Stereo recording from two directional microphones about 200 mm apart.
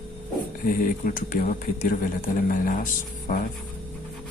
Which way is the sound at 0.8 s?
45° left (ahead or behind).